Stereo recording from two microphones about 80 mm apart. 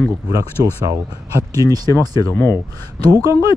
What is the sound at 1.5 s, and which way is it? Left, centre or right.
Speech, right.